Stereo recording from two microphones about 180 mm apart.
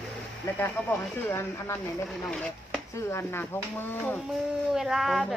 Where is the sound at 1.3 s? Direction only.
15° left (ahead or behind).